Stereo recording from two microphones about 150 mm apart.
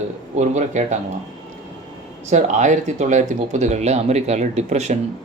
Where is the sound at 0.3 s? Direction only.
50° right (ahead or behind).